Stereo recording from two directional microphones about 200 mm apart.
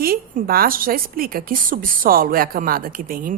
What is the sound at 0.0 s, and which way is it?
A woman's voice, 45° right (ahead or behind).